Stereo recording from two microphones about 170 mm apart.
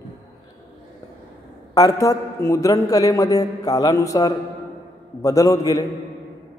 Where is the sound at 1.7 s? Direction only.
20° left (ahead or behind).